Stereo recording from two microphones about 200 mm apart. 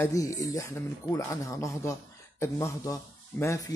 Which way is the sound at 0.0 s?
15° left (ahead or behind).